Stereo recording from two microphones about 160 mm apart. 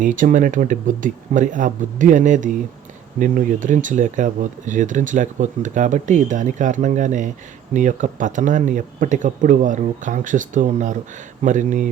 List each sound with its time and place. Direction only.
0.0 s speech: 55° right (ahead or behind)